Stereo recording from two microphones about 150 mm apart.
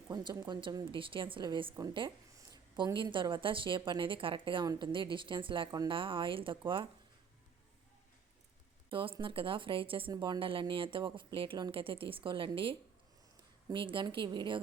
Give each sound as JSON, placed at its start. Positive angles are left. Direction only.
{"t": 0.1, "sound": "a woman's voice", "side_deg": -30}
{"t": 8.9, "sound": "a woman's voice", "side_deg": -35}